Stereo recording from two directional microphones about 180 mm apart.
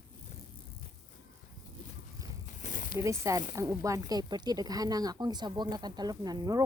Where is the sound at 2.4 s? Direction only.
45° left (ahead or behind).